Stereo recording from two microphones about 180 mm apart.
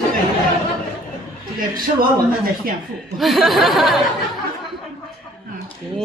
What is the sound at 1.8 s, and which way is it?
Speech, 55° right (ahead or behind).